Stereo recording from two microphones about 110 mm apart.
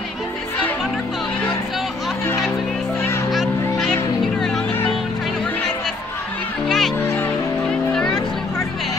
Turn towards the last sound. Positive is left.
turn(degrees=20)  # may be behind; listen again after turning